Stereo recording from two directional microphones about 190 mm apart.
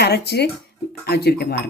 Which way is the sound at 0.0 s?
60° left (ahead or behind).